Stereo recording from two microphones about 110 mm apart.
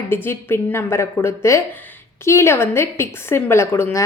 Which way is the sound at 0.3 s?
25° left (ahead or behind).